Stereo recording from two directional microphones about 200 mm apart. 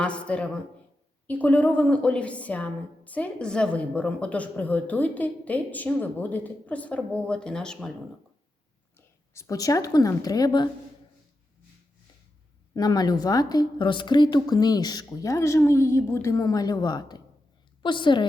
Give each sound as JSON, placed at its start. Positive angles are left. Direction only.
{"t": 0.0, "sound": "a woman's voice", "side_deg": 5}
{"t": 9.0, "sound": "a woman's voice", "side_deg": 15}
{"t": 12.7, "sound": "a woman's voice", "side_deg": 20}